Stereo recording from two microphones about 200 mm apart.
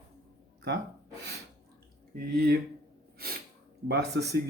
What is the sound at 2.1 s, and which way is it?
Speech, 50° right (ahead or behind).